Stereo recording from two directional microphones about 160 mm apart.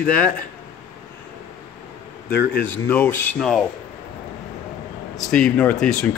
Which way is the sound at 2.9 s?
10° left (ahead or behind).